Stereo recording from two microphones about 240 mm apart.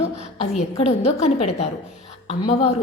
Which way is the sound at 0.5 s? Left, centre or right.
Left.